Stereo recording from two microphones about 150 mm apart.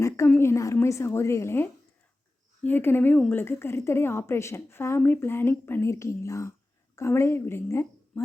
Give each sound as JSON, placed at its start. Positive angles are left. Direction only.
{"t": 0.3, "sound": "a woman's voice", "side_deg": 15}